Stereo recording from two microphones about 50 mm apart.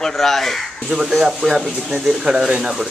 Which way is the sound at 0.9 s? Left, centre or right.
Centre.